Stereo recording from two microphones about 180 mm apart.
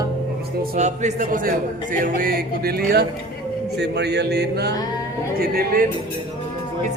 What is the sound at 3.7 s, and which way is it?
Music, 70° right (ahead or behind).